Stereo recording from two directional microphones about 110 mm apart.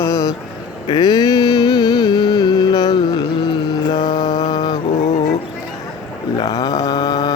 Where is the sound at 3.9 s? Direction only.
40° left (ahead or behind).